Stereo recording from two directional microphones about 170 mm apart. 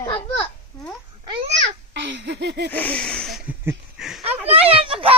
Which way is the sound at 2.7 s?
10° left (ahead or behind).